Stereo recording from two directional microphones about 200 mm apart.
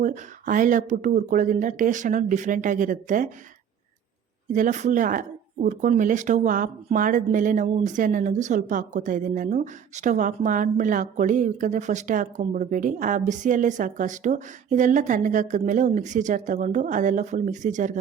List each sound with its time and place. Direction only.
0.0 s speech: 40° right (ahead or behind)
4.4 s speech: 40° right (ahead or behind)